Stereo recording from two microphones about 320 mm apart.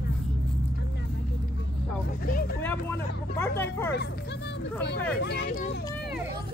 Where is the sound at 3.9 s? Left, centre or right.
Left.